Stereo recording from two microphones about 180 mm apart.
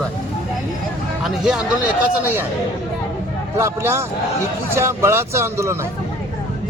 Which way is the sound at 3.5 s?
15° right (ahead or behind).